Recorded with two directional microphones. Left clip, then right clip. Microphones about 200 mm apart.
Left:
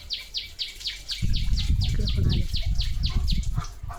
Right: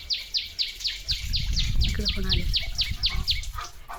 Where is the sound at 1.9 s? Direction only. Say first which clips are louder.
Right 5 dB; 20° right (ahead or behind).